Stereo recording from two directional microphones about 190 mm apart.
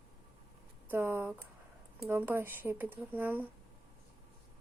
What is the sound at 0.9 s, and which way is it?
Speech, 10° right (ahead or behind).